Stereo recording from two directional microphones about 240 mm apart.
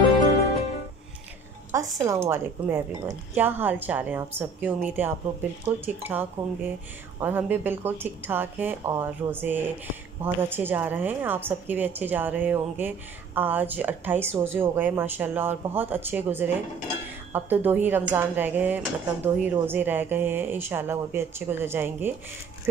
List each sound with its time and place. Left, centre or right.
1.7 s a woman's voice: centre